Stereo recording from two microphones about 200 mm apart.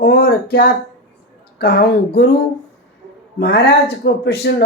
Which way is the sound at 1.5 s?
50° left (ahead or behind).